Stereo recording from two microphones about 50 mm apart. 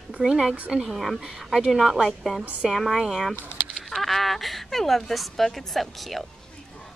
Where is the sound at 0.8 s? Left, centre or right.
Centre.